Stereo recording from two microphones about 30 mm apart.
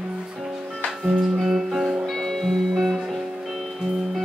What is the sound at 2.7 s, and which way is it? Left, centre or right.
Music, centre.